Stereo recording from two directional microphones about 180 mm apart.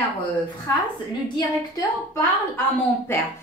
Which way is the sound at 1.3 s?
15° left (ahead or behind).